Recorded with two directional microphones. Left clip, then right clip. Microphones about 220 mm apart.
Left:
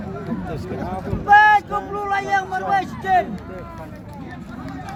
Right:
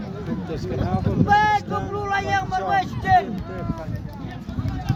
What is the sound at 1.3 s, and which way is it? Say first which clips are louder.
Speech: left 6 dB; 15° right (ahead or behind).